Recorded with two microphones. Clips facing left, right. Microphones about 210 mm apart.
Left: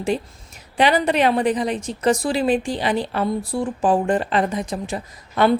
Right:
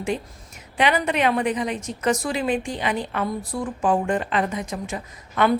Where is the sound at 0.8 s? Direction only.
35° left (ahead or behind).